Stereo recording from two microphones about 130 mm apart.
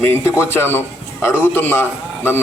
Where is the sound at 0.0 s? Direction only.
15° left (ahead or behind).